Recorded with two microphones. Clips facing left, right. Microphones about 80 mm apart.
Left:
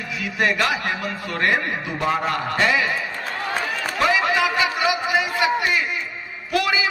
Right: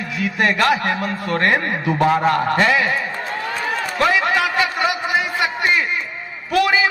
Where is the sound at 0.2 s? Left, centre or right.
Right.